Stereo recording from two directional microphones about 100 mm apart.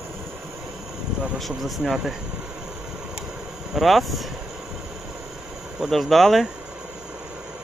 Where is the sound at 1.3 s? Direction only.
Centre (ahead or behind).